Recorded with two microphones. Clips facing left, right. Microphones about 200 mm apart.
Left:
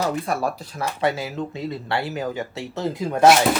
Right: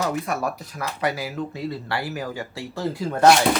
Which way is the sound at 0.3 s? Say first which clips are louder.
Left 2 dB; 30° left (ahead or behind).